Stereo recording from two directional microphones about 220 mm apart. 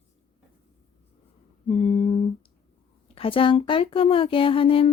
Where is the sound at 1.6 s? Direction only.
25° left (ahead or behind).